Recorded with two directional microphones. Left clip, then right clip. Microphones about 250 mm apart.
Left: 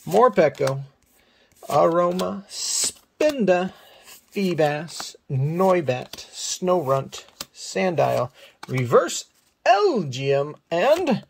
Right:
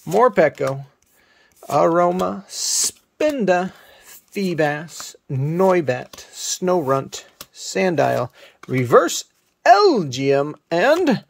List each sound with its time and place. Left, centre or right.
0.2 s speech: centre
1.8 s speech: centre